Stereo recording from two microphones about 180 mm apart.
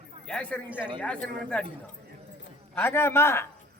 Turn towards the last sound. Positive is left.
turn(degrees=15)  # may be behind; listen again after turning